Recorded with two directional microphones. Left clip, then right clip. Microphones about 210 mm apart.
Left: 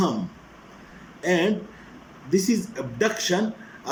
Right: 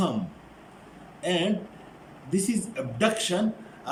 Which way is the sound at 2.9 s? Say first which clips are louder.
Left 1 dB; 15° right (ahead or behind).